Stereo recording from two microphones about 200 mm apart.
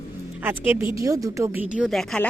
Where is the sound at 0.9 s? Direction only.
15° right (ahead or behind).